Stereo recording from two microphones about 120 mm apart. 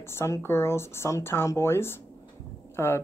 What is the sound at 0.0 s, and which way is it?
Speech, 20° left (ahead or behind).